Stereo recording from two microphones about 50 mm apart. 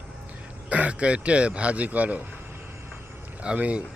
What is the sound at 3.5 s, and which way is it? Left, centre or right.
Speech, right.